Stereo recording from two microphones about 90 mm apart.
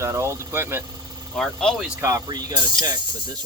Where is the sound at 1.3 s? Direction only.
5° left (ahead or behind).